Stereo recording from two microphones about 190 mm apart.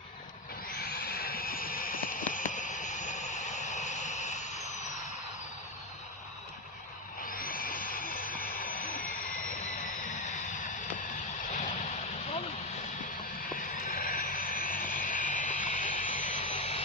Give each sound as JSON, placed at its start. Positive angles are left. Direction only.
{"t": 0.9, "sound": "vehicle", "side_deg": 55}
{"t": 7.3, "sound": "a sound", "side_deg": 45}
{"t": 8.7, "sound": "jet engine", "side_deg": 45}
{"t": 9.5, "sound": "vehicle", "side_deg": 40}
{"t": 13.5, "sound": "vehicle", "side_deg": 45}